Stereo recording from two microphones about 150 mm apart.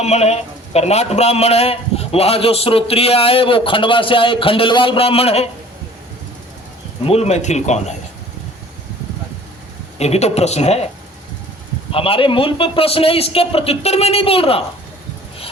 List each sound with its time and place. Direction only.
0.0 s a man's voice: 45° left (ahead or behind)
7.0 s speech: 45° left (ahead or behind)
10.0 s speech: 45° left (ahead or behind)
11.9 s a man's voice: 40° left (ahead or behind)